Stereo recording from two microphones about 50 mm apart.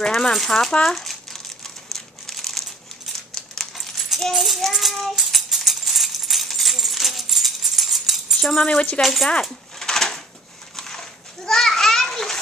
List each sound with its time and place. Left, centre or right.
0.0 s speech: centre
0.8 s crumpling: centre
4.2 s rattle: centre
8.5 s speech: left
9.0 s speech: centre
9.4 s a sound: centre
10.8 s children playing: centre